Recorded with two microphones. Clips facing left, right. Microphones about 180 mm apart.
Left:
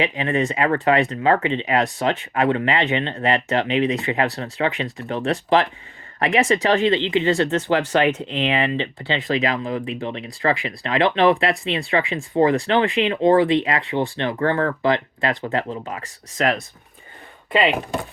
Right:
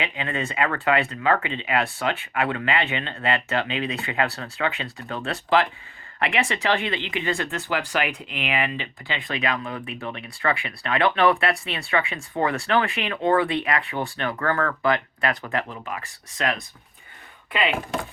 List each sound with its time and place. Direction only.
0.0 s speech: 30° left (ahead or behind)